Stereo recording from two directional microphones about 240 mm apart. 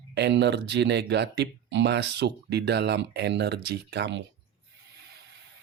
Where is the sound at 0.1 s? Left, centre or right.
Right.